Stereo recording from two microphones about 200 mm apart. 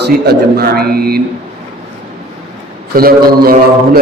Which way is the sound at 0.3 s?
50° right (ahead or behind).